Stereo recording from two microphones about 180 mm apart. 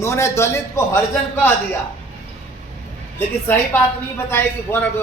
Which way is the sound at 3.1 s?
10° left (ahead or behind).